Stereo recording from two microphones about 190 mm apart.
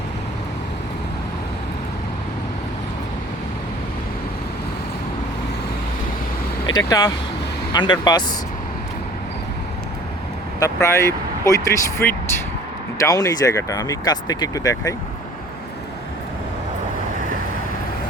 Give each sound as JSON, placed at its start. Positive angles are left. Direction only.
{"t": 6.7, "sound": "speech", "side_deg": 20}
{"t": 10.6, "sound": "speech", "side_deg": 15}